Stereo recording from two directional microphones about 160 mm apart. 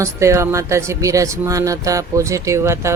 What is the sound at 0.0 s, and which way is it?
Speech, 20° right (ahead or behind).